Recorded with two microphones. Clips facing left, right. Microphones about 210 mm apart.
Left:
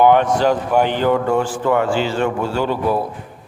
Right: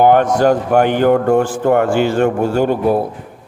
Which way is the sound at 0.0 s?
45° right (ahead or behind).